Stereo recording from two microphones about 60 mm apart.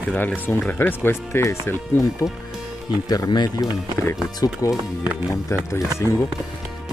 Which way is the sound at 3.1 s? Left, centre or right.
Left.